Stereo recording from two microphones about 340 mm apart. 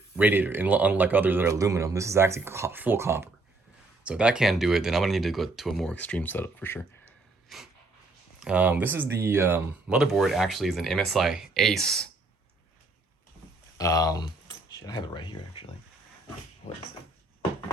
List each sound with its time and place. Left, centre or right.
0.2 s a man's voice: centre
13.7 s speech: centre
16.6 s a sound: left